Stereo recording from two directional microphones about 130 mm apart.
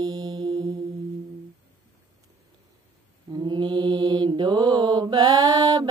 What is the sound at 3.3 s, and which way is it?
Mantra, 35° right (ahead or behind).